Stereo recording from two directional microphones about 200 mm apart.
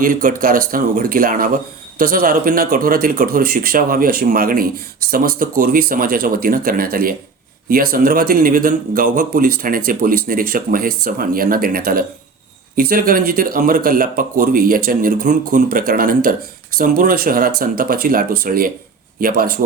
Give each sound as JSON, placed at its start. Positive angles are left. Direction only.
{"t": 0.0, "sound": "speech", "side_deg": -40}